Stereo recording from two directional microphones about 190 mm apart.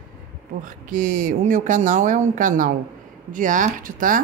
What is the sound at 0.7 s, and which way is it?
A woman's voice, 45° right (ahead or behind).